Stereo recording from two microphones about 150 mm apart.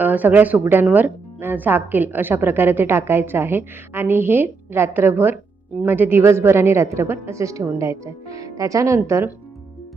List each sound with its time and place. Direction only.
0.0 s a woman's voice: 10° right (ahead or behind)